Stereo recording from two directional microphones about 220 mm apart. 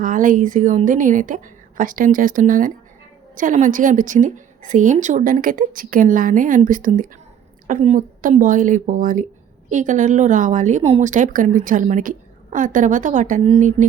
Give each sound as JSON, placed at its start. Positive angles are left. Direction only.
{"t": 0.0, "sound": "a woman's voice", "side_deg": -35}